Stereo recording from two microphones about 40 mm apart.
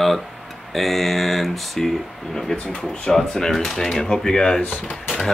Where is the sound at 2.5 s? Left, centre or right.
Centre.